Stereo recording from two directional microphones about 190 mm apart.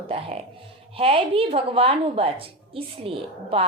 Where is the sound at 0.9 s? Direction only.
30° right (ahead or behind).